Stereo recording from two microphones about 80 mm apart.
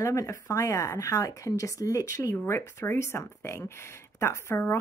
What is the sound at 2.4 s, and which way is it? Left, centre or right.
A woman's voice, left.